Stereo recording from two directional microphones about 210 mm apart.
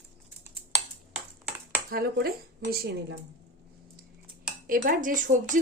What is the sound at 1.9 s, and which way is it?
A woman's voice, 50° right (ahead or behind).